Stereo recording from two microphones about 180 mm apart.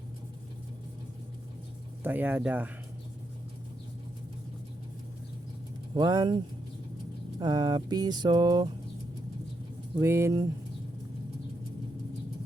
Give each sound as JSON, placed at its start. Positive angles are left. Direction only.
{"t": 2.0, "sound": "speech", "side_deg": -10}
{"t": 5.9, "sound": "a sound", "side_deg": -20}
{"t": 10.0, "sound": "speech", "side_deg": -15}